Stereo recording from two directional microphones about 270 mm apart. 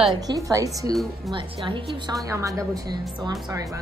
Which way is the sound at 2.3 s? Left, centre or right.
Centre.